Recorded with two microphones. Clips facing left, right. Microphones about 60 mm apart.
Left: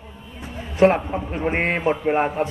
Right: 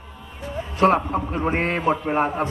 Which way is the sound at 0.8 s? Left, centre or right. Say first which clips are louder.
Left 1 dB; left.